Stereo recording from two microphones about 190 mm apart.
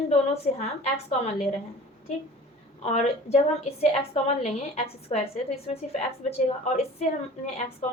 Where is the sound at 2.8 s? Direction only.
35° left (ahead or behind).